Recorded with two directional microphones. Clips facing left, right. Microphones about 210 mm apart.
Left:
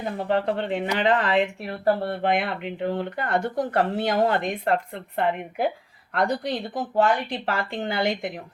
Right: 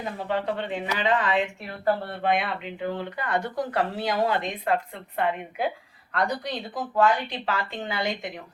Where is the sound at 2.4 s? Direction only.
65° left (ahead or behind).